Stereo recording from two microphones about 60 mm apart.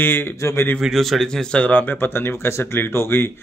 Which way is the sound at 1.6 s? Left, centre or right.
Left.